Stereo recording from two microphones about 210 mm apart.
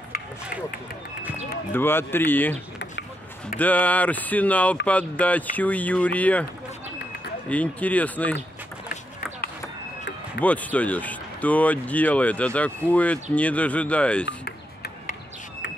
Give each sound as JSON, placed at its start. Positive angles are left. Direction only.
{"t": 1.7, "sound": "speech", "side_deg": 10}
{"t": 3.5, "sound": "speech", "side_deg": 5}
{"t": 7.4, "sound": "speech", "side_deg": 5}
{"t": 10.4, "sound": "speech", "side_deg": 5}
{"t": 14.2, "sound": "a sound", "side_deg": 50}